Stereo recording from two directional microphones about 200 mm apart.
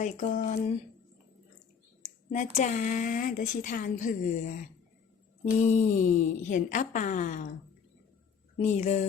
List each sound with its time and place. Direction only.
0.0 s speech: 40° left (ahead or behind)
2.0 s speech: 35° left (ahead or behind)
8.5 s speech: 35° left (ahead or behind)